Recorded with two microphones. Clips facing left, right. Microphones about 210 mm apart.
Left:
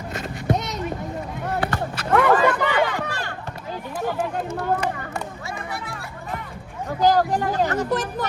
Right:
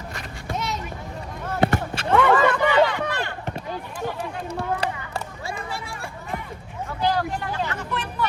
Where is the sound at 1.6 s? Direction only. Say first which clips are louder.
Right 7 dB; 25° right (ahead or behind).